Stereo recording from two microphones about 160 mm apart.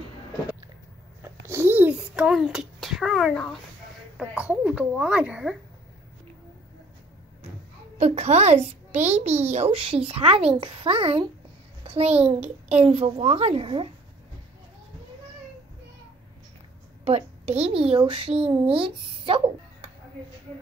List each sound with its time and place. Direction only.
1.2 s a sound: 15° right (ahead or behind); by 3.5 s centre (ahead or behind)
4.2 s a woman's voice: 5° right (ahead or behind)
8.0 s a child's voice: 45° right (ahead or behind)
17.0 s a child's voice: 40° right (ahead or behind)